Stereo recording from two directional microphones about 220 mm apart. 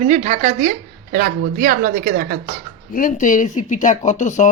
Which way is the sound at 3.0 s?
35° left (ahead or behind).